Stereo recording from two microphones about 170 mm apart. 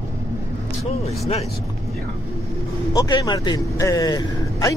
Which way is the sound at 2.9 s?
25° left (ahead or behind).